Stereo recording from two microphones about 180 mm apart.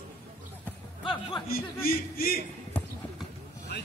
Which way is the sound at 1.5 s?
55° left (ahead or behind).